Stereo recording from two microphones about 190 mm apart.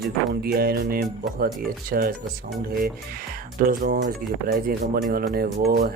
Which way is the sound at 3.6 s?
50° right (ahead or behind).